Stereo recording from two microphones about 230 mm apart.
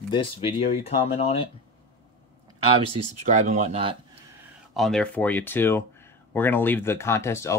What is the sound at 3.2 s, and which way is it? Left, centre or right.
Speech, right.